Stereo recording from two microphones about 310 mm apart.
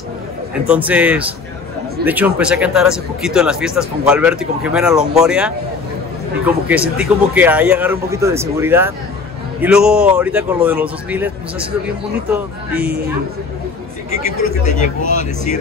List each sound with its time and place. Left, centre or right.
0.7 s speech: centre
14.6 s speech: left